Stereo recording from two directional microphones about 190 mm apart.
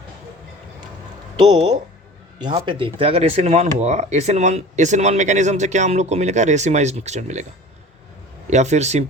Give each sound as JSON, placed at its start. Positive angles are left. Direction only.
{"t": 2.4, "sound": "speech", "side_deg": -25}
{"t": 8.4, "sound": "speech", "side_deg": -35}